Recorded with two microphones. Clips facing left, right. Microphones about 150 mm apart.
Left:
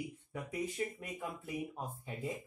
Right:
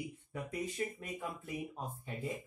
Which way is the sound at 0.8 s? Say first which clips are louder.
Right 1 dB; centre (ahead or behind).